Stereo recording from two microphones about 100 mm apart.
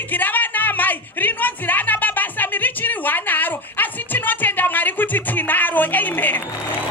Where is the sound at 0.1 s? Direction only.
15° left (ahead or behind).